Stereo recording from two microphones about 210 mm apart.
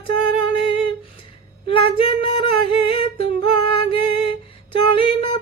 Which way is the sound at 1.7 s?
25° left (ahead or behind).